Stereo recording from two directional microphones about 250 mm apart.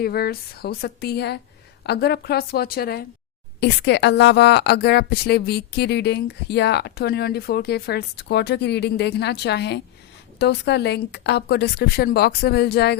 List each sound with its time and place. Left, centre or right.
0.0 s a woman's voice: left